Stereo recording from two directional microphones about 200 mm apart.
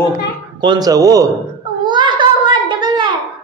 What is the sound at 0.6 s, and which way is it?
Speech, 20° right (ahead or behind).